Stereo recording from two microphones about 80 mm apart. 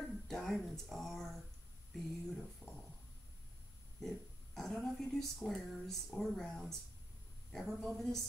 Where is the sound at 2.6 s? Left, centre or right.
Centre.